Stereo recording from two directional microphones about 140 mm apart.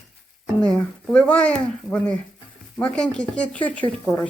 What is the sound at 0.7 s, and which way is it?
Speech, 10° left (ahead or behind).